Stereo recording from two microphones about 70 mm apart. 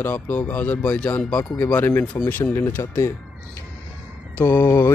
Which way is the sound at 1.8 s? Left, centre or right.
Left.